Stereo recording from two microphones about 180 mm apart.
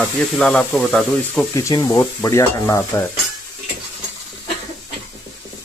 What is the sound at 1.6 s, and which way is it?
Stir, 20° left (ahead or behind).